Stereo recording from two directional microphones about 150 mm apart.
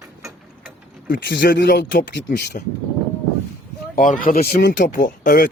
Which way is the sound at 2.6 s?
65° left (ahead or behind).